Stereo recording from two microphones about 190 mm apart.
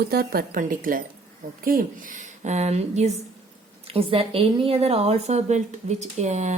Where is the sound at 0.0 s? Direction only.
55° right (ahead or behind).